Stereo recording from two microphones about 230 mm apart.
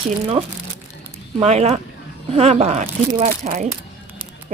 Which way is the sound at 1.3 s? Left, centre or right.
Right.